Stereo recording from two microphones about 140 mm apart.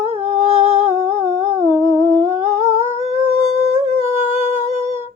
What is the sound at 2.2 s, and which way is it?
Humming, 50° right (ahead or behind).